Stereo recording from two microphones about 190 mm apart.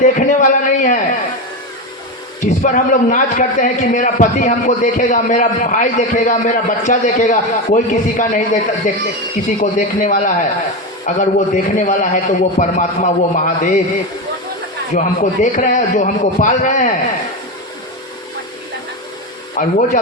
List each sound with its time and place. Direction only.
0.0 s a sound: 45° left (ahead or behind)
2.6 s a man's voice: 45° left (ahead or behind)
14.9 s a man's voice: 40° left (ahead or behind)
19.5 s a man's voice: 40° left (ahead or behind)